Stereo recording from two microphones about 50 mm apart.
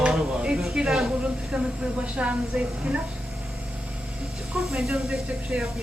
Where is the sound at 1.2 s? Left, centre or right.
Centre.